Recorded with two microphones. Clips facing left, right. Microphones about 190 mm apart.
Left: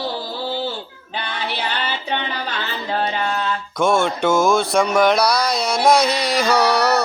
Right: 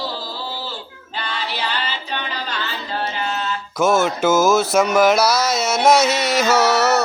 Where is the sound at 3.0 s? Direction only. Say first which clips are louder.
Left 2 dB; 60° left (ahead or behind).